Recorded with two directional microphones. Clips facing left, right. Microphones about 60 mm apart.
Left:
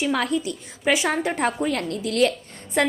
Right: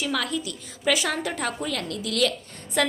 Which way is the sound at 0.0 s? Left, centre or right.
Left.